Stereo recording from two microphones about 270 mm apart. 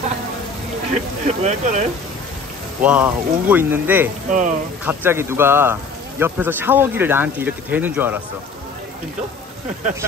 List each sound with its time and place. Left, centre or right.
1.2 s speech: right
2.8 s a man's voice: centre
4.3 s speech: right
4.8 s a man's voice: centre